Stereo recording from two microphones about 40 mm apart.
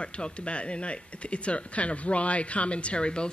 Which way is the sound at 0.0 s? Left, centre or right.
Left.